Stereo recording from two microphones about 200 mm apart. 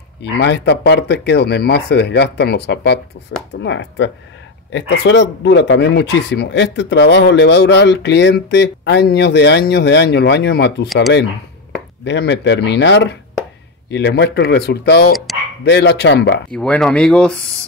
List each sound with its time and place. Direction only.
0.2 s speech: 60° left (ahead or behind)
12.0 s speech: 60° left (ahead or behind)
16.5 s speech: 5° left (ahead or behind)